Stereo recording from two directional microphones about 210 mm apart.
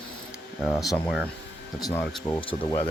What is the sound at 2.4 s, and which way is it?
Speech, 25° left (ahead or behind).